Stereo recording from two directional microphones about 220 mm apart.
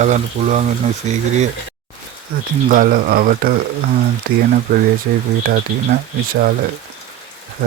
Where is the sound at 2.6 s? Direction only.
40° right (ahead or behind).